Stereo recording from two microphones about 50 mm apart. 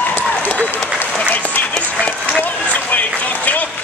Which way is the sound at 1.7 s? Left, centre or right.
Left.